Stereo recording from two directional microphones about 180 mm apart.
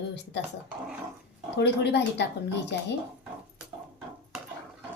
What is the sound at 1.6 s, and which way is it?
Speech, 70° left (ahead or behind).